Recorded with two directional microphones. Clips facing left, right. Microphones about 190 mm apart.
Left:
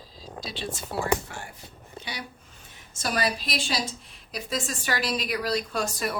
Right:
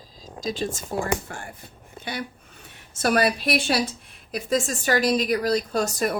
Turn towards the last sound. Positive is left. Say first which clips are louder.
# right 5 dB
turn(degrees=-45)  # may be behind; listen again after turning